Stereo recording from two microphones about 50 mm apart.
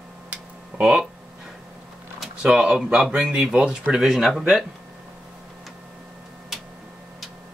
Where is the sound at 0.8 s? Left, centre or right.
Right.